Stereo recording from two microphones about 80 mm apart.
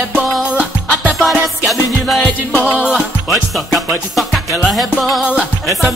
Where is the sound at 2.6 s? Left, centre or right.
Centre.